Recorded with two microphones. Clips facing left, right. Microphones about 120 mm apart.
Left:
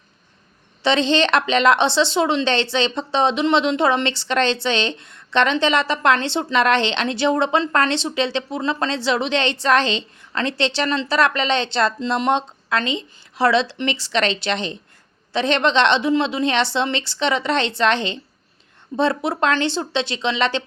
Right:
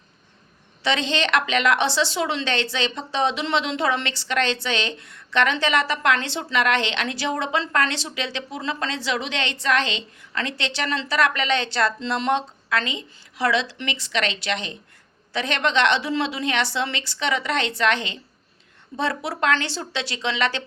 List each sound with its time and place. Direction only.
0.8 s a woman's voice: 30° left (ahead or behind)